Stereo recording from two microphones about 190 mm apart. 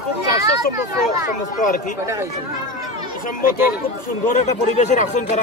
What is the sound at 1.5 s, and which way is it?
Speech, 45° left (ahead or behind).